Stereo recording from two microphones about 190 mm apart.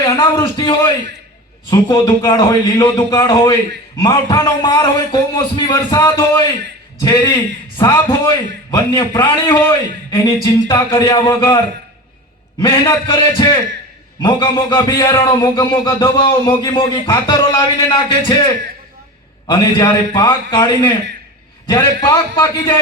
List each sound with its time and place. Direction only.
0.2 s a man's voice: 25° left (ahead or behind)
19.5 s a man's voice: 25° left (ahead or behind)
21.7 s a man's voice: 25° left (ahead or behind)
22.1 s a man's voice: 15° left (ahead or behind)